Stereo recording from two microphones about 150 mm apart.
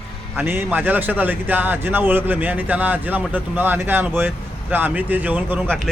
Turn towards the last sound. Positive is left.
turn(degrees=-10)  # may be behind; listen again after turning